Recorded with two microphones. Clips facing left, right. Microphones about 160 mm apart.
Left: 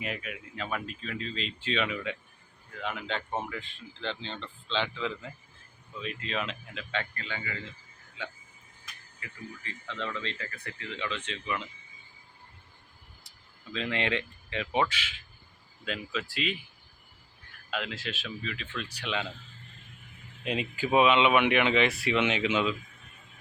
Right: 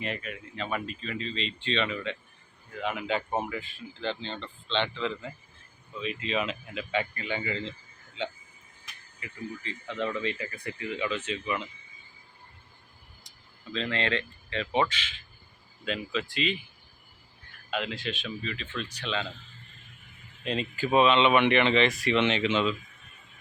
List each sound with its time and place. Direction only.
0.0 s speech: 5° left (ahead or behind)
2.7 s speech: 5° right (ahead or behind)
13.7 s speech: 15° left (ahead or behind)
17.7 s speech: centre (ahead or behind)
20.4 s speech: 10° left (ahead or behind)